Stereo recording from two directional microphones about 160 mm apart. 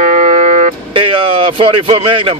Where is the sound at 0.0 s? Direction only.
50° right (ahead or behind).